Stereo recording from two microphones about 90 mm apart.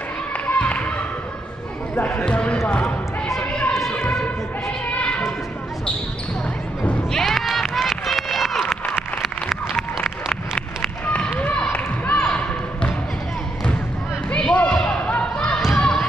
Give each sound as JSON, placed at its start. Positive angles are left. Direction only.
{"t": 0.5, "sound": "basketball bounce", "side_deg": 15}
{"t": 2.0, "sound": "speech", "side_deg": 20}
{"t": 3.3, "sound": "a sound", "side_deg": 10}
{"t": 6.9, "sound": "run", "side_deg": 5}
{"t": 11.1, "sound": "a sound", "side_deg": 15}
{"t": 14.3, "sound": "basketball bounce", "side_deg": 15}